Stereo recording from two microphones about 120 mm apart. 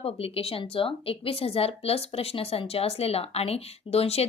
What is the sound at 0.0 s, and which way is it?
A woman's voice, 55° left (ahead or behind).